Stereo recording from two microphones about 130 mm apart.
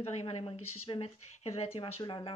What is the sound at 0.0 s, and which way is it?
Speech, 55° left (ahead or behind).